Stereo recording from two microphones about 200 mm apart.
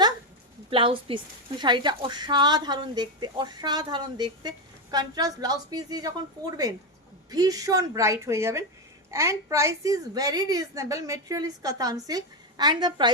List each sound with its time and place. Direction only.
0.7 s a woman's voice: 25° right (ahead or behind)